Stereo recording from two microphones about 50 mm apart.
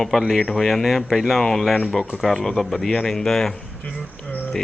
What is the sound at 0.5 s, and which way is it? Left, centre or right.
Speech, centre.